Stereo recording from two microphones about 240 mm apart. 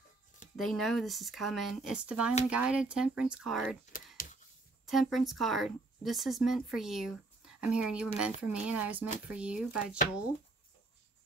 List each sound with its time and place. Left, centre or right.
0.6 s speech: centre
3.9 s speech: left
4.8 s speech: centre